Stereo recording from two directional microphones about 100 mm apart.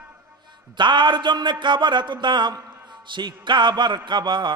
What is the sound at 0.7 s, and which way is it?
A man's voice, 50° right (ahead or behind).